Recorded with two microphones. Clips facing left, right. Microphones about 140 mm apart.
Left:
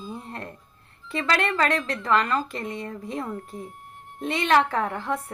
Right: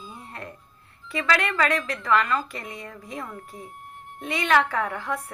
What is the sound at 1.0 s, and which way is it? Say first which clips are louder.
A woman's voice: even; 30° left (ahead or behind).